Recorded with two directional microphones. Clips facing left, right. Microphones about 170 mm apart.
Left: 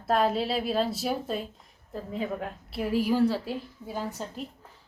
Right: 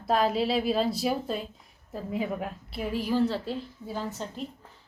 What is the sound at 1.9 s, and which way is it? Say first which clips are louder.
Speech: right 1 dB; 10° right (ahead or behind).